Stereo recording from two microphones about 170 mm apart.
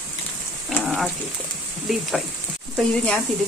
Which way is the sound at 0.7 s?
Centre (ahead or behind).